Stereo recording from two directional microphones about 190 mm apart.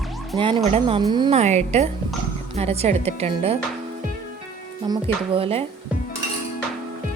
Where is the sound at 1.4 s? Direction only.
35° right (ahead or behind).